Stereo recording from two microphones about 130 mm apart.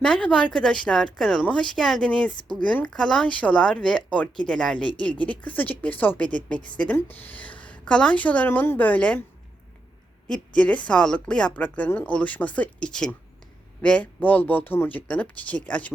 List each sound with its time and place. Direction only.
0.0 s a woman's voice: 5° left (ahead or behind)
10.2 s a woman's voice: 5° left (ahead or behind)